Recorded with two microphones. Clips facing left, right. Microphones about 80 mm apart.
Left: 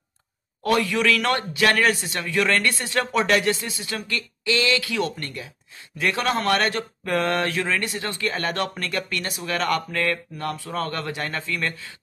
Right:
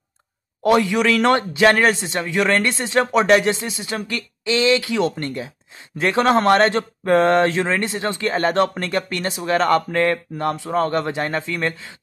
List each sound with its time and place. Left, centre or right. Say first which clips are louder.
0.7 s a man's voice: right 4 dB; right